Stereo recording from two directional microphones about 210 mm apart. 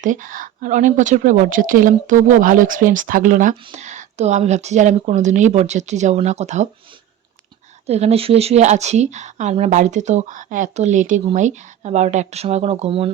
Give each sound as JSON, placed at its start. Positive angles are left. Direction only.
{"t": 0.0, "sound": "speech", "side_deg": -40}
{"t": 7.9, "sound": "speech", "side_deg": -30}